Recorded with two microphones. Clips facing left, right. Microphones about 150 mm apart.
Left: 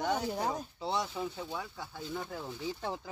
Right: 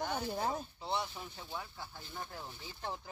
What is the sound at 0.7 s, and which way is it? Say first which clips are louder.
Speech: left 4 dB; 90° left.